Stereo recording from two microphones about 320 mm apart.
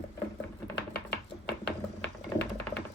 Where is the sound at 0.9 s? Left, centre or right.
Left.